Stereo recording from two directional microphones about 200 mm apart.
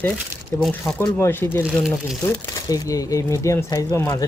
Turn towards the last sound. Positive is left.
turn(degrees=15)  # may be behind; listen again after turning